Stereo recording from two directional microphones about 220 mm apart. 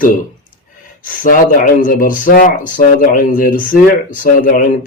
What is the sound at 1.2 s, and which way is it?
Speech, 40° left (ahead or behind).